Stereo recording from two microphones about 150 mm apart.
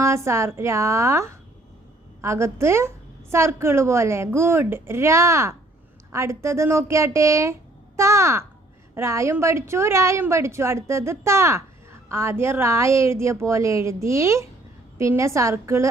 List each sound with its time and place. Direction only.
0.0 s a woman's voice: 20° right (ahead or behind)